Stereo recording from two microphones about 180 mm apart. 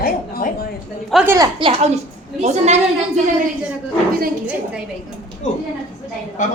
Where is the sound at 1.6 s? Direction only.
30° right (ahead or behind).